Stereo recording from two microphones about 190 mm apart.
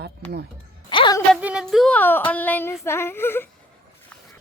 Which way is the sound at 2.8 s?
15° left (ahead or behind).